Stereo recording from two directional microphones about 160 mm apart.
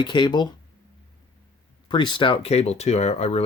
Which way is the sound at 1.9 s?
30° left (ahead or behind).